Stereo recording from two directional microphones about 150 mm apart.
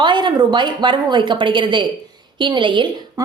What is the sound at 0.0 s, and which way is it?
A woman's voice, 30° right (ahead or behind).